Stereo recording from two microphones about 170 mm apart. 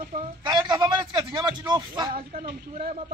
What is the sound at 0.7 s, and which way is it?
A man's voice, 25° right (ahead or behind).